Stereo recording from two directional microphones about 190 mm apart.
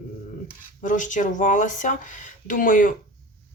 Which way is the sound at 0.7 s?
40° left (ahead or behind).